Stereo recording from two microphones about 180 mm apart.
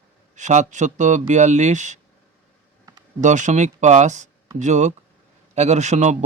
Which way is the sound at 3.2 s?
45° right (ahead or behind).